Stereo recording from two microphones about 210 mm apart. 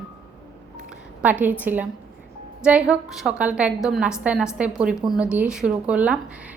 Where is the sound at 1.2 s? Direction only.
10° right (ahead or behind).